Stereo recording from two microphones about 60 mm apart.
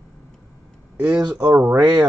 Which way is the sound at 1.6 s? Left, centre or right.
Right.